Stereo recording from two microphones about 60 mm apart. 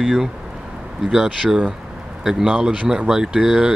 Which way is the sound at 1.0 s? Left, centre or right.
Centre.